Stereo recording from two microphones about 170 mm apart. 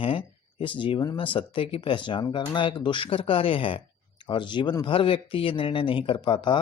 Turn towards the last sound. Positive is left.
turn(degrees=30)  # may be behind; listen again after turning